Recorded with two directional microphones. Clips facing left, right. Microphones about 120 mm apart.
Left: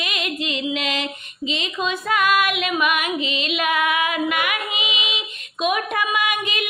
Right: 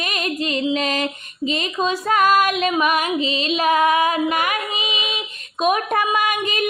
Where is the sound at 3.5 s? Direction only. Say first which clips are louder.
Right 5 dB; 35° right (ahead or behind).